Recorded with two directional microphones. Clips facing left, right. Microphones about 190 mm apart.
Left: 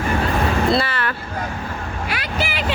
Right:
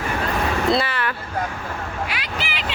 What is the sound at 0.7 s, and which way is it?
Vehicle, 15° right (ahead or behind).